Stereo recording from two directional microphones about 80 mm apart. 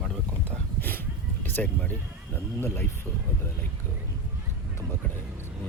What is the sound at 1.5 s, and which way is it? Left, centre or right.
Speech, centre.